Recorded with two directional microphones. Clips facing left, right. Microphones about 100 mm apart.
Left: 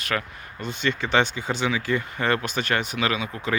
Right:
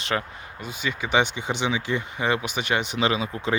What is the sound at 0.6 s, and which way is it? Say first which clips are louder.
Speech: left 3 dB; 10° right (ahead or behind).